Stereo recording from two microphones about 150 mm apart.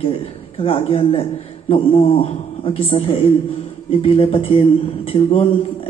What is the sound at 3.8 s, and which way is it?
Mantra, 40° left (ahead or behind).